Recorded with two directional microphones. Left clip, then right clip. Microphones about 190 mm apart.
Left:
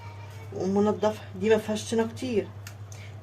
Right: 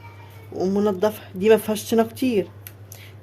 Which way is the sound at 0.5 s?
60° right (ahead or behind).